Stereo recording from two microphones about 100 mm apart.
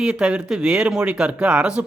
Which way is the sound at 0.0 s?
10° right (ahead or behind).